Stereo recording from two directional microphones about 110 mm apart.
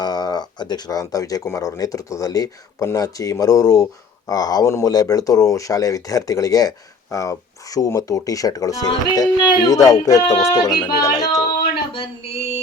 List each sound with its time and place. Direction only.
0.0 s speech: 40° left (ahead or behind)
10.3 s music: 25° left (ahead or behind)
10.8 s speech: 40° left (ahead or behind)
11.6 s a sound: 65° left (ahead or behind)